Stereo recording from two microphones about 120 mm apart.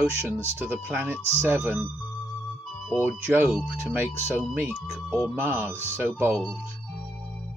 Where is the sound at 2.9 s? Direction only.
15° right (ahead or behind).